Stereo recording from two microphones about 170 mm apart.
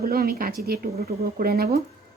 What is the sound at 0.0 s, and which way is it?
Speech, 65° right (ahead or behind).